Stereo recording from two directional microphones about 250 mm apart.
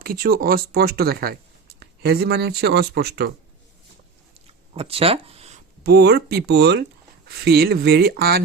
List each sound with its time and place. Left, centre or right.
0.0 s speech: right
4.7 s a sound: right
5.8 s speech: right